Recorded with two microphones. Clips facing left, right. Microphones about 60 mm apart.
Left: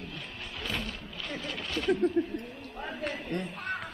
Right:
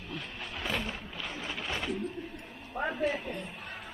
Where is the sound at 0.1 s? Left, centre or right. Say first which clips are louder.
Right 2 dB; centre.